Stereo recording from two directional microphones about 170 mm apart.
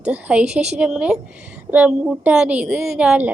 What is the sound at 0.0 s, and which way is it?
A woman's voice, 5° right (ahead or behind).